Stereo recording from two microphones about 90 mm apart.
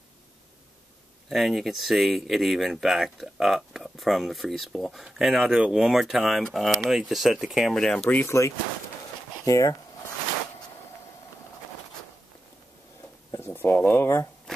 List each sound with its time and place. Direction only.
1.3 s speech: centre (ahead or behind)
8.1 s speech: 30° left (ahead or behind)
13.5 s a sound: 20° left (ahead or behind)